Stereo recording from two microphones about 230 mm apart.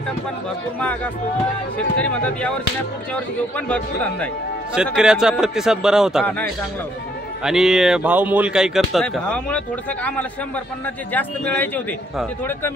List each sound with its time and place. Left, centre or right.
2.0 s a man's voice: centre
3.5 s a man's voice: centre
7.4 s a man's voice: centre
11.1 s speech: centre